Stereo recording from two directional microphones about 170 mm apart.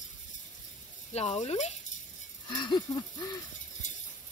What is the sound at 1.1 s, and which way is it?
Speech, 40° left (ahead or behind).